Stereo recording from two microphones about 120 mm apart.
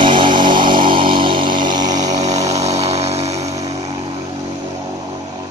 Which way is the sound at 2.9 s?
60° right (ahead or behind).